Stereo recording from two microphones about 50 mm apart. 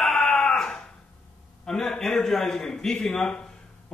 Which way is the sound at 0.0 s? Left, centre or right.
Centre.